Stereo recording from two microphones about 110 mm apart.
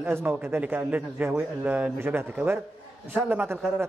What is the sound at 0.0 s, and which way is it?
A man's voice, 20° right (ahead or behind).